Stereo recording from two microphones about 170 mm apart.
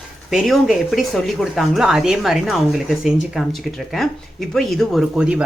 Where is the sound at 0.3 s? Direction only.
Centre (ahead or behind).